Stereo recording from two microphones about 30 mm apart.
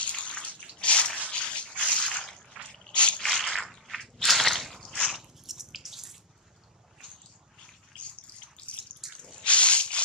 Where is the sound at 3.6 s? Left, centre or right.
Centre.